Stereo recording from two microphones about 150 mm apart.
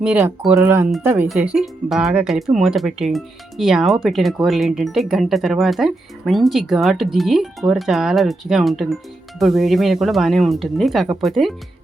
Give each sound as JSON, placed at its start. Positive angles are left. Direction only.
{"t": 0.4, "sound": "speech", "side_deg": -10}
{"t": 1.3, "sound": "speech", "side_deg": -5}